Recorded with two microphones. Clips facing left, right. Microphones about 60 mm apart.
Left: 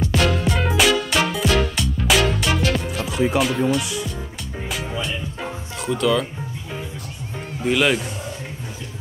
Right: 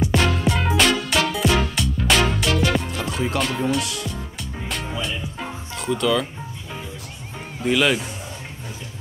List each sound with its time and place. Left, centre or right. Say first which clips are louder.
0.1 s music: even; centre
3.8 s speech: left 2 dB; centre
4.6 s music: left 1 dB; centre
7.6 s speech: even; centre